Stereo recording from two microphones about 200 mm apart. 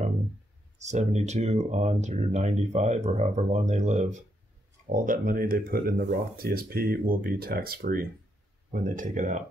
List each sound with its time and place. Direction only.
0.7 s speech: 35° right (ahead or behind)